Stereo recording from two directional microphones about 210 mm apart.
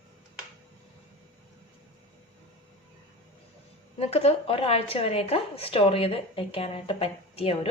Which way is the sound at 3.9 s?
30° left (ahead or behind).